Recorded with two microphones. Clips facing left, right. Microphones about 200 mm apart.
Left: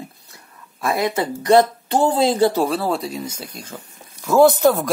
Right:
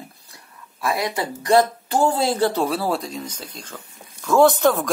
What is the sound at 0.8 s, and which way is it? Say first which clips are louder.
Speech: left 3 dB; 25° left (ahead or behind).